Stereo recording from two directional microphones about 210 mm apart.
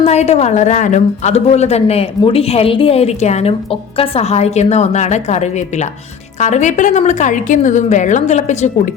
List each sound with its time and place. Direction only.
0.0 s a woman's voice: 30° left (ahead or behind)